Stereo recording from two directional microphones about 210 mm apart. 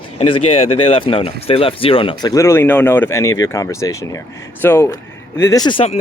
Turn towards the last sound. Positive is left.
turn(degrees=25)  # may be behind; listen again after turning